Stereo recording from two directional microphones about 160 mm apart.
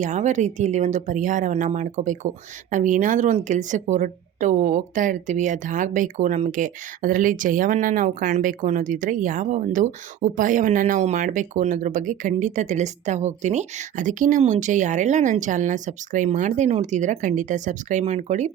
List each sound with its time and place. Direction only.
0.0 s speech: 50° right (ahead or behind)